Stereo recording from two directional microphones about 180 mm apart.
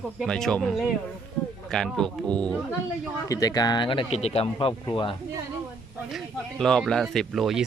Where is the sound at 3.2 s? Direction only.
20° left (ahead or behind).